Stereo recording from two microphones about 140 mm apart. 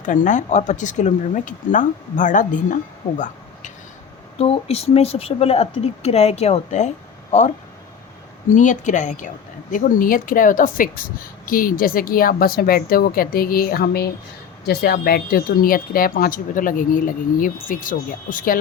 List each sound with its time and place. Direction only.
0.0 s speech: 65° left (ahead or behind)
4.4 s speech: 45° left (ahead or behind)
8.5 s speech: 60° left (ahead or behind)
9.7 s a woman's voice: 85° left